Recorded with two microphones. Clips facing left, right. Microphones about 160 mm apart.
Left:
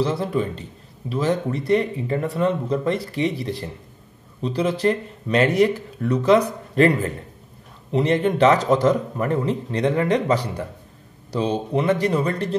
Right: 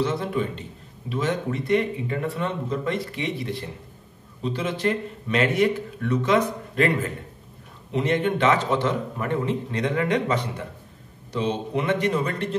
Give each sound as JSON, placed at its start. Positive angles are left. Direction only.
{"t": 0.0, "sound": "a man's voice", "side_deg": 35}